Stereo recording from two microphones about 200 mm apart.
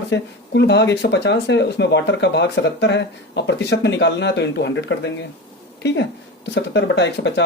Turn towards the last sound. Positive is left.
turn(degrees=60)  # may be behind; listen again after turning